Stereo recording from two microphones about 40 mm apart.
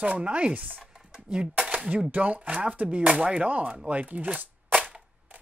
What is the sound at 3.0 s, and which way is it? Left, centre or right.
Speech, right.